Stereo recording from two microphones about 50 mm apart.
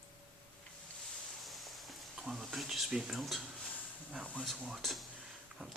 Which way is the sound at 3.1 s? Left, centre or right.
Centre.